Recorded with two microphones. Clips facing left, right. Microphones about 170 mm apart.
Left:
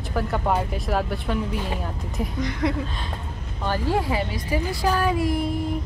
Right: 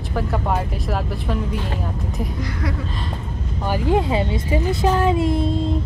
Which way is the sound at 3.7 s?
15° right (ahead or behind).